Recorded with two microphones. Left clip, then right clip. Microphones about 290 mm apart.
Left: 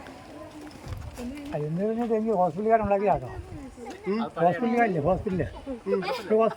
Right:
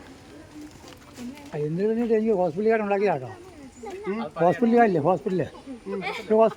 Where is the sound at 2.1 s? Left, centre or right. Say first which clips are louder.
Even; centre.